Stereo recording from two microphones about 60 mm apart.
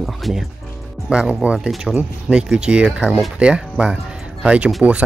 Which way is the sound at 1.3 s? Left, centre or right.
Centre.